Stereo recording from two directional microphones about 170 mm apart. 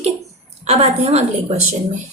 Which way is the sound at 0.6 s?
40° right (ahead or behind).